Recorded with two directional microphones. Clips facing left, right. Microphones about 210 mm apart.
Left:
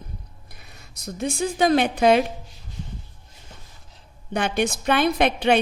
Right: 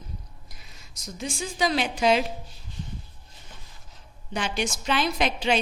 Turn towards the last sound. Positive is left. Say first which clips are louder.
# left 6 dB
turn(degrees=60)  # may be behind; listen again after turning